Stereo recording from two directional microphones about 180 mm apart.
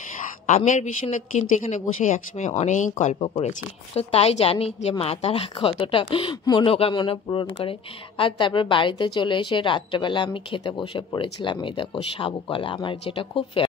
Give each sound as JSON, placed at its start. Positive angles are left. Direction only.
{"t": 0.5, "sound": "speech", "side_deg": 40}